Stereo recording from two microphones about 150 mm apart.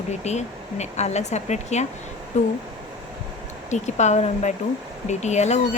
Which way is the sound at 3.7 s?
50° left (ahead or behind).